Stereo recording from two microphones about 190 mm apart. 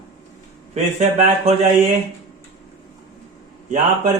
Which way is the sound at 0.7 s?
35° right (ahead or behind).